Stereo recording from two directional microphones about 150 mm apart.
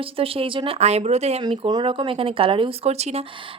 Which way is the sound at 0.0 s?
40° right (ahead or behind).